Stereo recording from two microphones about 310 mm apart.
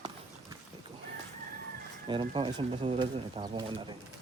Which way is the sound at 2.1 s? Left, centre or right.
Centre.